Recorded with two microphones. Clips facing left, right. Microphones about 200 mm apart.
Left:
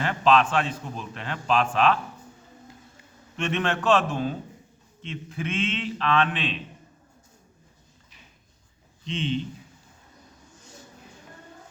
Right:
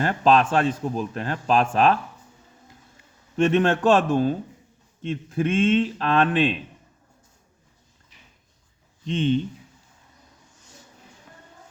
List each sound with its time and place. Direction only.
0.0 s speech: 45° right (ahead or behind)
3.3 s speech: 45° right (ahead or behind)
9.0 s speech: 45° right (ahead or behind)